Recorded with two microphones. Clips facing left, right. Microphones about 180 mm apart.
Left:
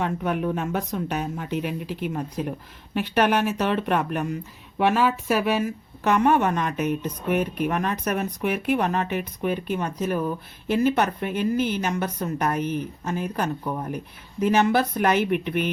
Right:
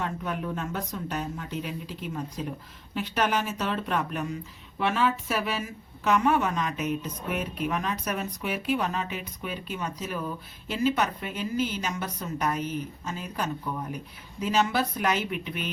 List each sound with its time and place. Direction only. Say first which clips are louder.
0.0 s a woman's voice: left 7 dB; 60° left (ahead or behind)